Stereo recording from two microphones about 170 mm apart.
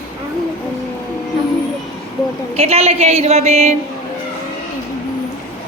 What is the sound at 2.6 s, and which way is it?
A woman's voice, 40° right (ahead or behind).